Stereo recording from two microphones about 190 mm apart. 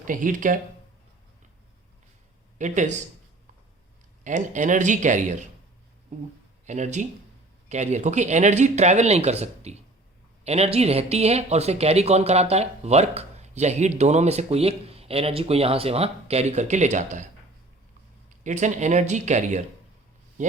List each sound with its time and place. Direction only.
0.0 s speech: 45° right (ahead or behind)
2.6 s speech: 40° right (ahead or behind)
4.2 s speech: 40° right (ahead or behind)
18.3 s speech: 40° right (ahead or behind)